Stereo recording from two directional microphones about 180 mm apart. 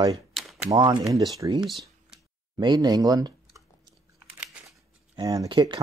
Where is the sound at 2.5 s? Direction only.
25° right (ahead or behind).